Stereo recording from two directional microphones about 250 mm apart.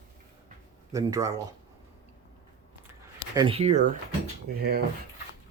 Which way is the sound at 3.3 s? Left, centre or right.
Centre.